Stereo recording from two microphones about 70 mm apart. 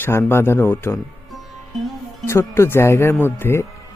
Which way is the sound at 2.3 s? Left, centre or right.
Left.